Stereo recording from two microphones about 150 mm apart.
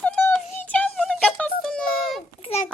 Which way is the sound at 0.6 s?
10° left (ahead or behind).